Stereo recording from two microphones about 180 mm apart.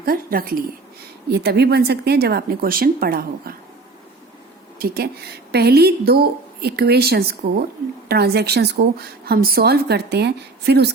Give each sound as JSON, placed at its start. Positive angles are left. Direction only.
{"t": 0.0, "sound": "a woman's voice", "side_deg": -55}
{"t": 1.3, "sound": "a woman's voice", "side_deg": -65}
{"t": 4.8, "sound": "a woman's voice", "side_deg": -60}